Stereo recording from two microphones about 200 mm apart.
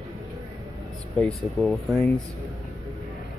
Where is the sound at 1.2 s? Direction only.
5° left (ahead or behind).